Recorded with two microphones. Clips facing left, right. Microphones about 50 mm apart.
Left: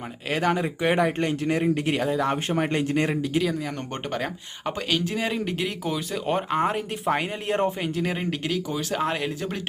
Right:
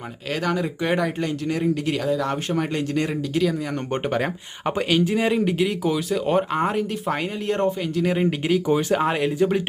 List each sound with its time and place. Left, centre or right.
0.3 s speech: left
0.9 s speech: left
4.1 s speech: centre
8.0 s speech: centre
8.6 s speech: right
9.0 s speech: centre